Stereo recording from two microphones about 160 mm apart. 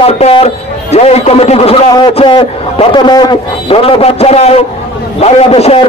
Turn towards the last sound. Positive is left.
turn(degrees=35)  # may be behind; listen again after turning